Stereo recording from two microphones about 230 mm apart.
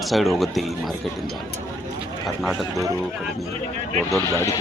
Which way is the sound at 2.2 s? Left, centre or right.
Centre.